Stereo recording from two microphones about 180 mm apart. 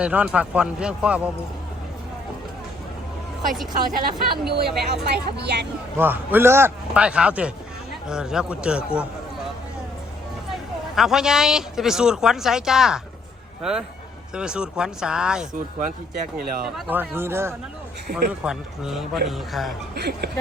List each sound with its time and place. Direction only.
0.0 s a man's voice: 5° right (ahead or behind)
4.0 s speech: 60° right (ahead or behind)
6.0 s a man's voice: 10° right (ahead or behind)
10.5 s speech: centre (ahead or behind)
15.8 s speech: 45° right (ahead or behind)
16.7 s a man's voice: 10° right (ahead or behind)
18.4 s speech: 5° right (ahead or behind)
20.0 s speech: 65° right (ahead or behind)